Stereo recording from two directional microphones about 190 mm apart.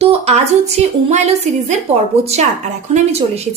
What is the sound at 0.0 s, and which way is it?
Speech, 35° right (ahead or behind).